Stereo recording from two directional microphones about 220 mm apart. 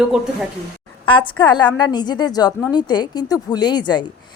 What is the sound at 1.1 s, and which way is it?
A woman's voice, 20° left (ahead or behind).